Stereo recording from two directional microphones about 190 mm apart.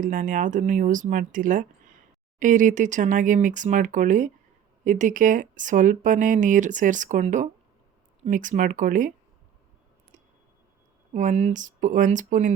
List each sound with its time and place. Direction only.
0.0 s speech: 45° right (ahead or behind)
11.1 s speech: 40° right (ahead or behind)